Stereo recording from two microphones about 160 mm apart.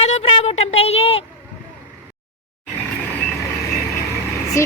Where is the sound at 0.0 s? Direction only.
40° left (ahead or behind).